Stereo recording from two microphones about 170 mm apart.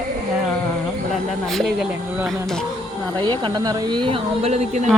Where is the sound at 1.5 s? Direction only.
Centre (ahead or behind).